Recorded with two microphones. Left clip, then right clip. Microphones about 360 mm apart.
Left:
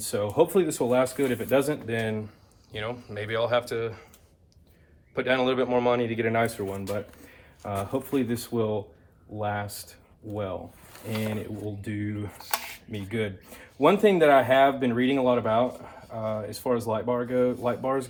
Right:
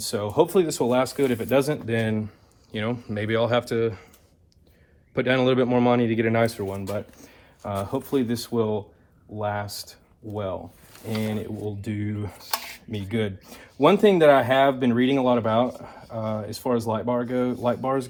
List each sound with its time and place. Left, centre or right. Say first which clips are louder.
0.0 s speech: right 1 dB; centre
5.1 s speech: right 3 dB; right